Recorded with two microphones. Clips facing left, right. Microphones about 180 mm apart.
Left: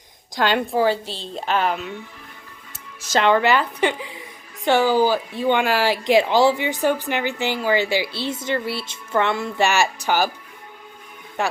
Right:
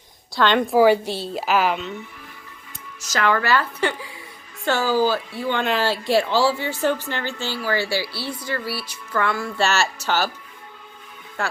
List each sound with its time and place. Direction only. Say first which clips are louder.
0.3 s a woman's voice: right 2 dB; 10° left (ahead or behind)
0.8 s a woman's voice: right 8 dB; 10° right (ahead or behind)
3.1 s a woman's voice: left 3 dB; 25° left (ahead or behind)
11.4 s speech: left 4 dB; 20° left (ahead or behind)